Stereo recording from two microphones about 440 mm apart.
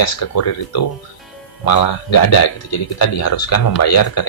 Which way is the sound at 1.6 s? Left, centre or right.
Left.